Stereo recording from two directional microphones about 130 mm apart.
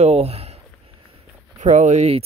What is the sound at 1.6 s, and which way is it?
Speech, 65° right (ahead or behind).